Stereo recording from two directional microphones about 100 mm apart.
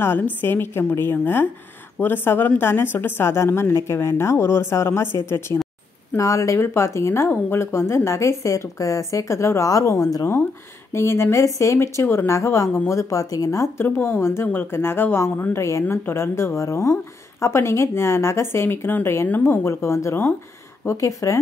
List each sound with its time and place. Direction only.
0.0 s a woman's voice: 20° left (ahead or behind)